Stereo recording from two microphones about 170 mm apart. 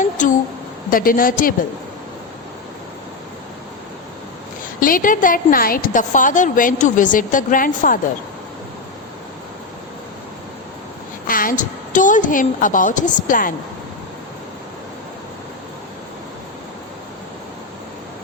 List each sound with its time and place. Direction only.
0.0 s a sound: 50° left (ahead or behind)
0.9 s a woman's voice: 55° left (ahead or behind)
4.8 s a woman's voice: 55° left (ahead or behind)
11.3 s a woman's voice: 55° left (ahead or behind)